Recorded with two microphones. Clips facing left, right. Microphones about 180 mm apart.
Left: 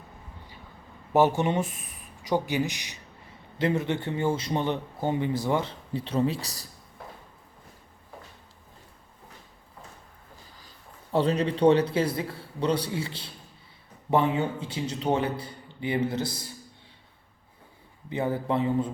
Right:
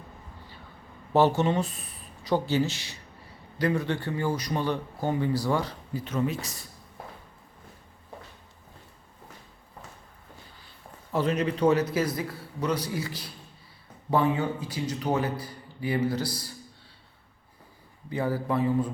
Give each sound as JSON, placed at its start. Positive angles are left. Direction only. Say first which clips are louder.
{"t": 1.1, "sound": "a man's voice", "louder": "even", "side_deg": 15}
{"t": 11.1, "sound": "a man's voice", "louder": "left 2 dB", "side_deg": 30}
{"t": 18.1, "sound": "a man's voice", "louder": "left 1 dB", "side_deg": 25}